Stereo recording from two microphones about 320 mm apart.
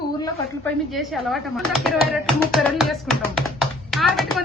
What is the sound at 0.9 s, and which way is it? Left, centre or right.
Speech, centre.